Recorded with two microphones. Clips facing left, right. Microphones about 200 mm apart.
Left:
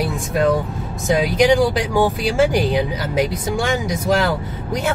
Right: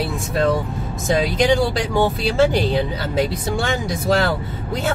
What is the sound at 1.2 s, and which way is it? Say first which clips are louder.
Speech: left 4 dB; 15° left (ahead or behind).